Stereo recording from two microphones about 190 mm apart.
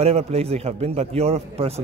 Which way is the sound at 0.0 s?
35° right (ahead or behind).